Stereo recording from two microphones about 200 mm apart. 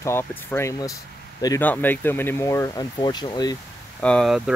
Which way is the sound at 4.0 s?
5° left (ahead or behind).